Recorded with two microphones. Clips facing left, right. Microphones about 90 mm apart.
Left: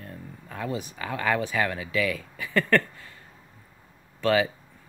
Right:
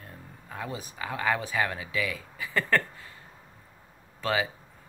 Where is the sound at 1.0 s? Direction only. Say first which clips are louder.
Left 1 dB; 20° right (ahead or behind).